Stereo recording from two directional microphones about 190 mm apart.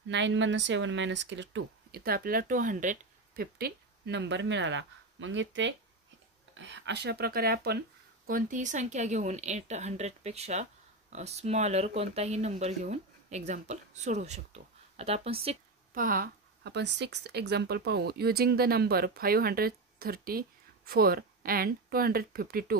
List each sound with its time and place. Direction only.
0.1 s a woman's voice: 70° right (ahead or behind); by 15.5 s 30° right (ahead or behind)
15.9 s speech: 45° right (ahead or behind)